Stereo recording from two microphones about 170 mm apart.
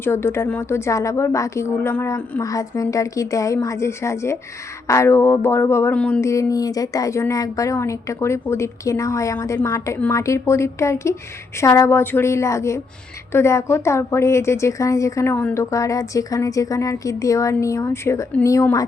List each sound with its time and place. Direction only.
0.0 s speech: 15° left (ahead or behind)